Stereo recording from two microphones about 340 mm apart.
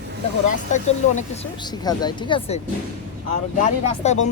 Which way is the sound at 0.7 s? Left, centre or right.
Left.